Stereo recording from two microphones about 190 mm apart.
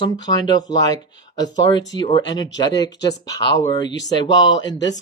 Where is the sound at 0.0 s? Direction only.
20° left (ahead or behind).